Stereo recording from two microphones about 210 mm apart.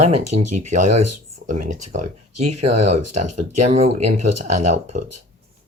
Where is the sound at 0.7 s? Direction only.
35° right (ahead or behind).